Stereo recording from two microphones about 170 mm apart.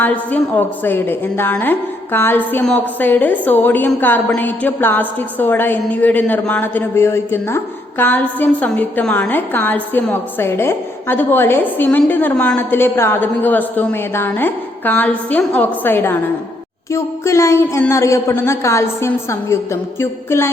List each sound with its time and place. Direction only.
0.0 s a man's voice: 10° left (ahead or behind)